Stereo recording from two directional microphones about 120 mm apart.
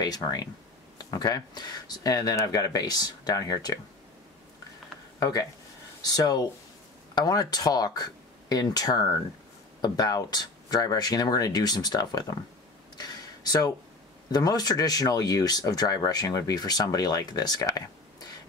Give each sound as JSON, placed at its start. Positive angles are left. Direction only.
{"t": 0.0, "sound": "speech", "side_deg": 35}
{"t": 6.0, "sound": "speech", "side_deg": 35}
{"t": 12.9, "sound": "a sound", "side_deg": 35}
{"t": 14.3, "sound": "speech", "side_deg": 30}